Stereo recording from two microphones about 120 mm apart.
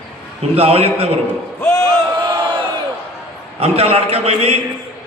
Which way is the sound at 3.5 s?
55° right (ahead or behind).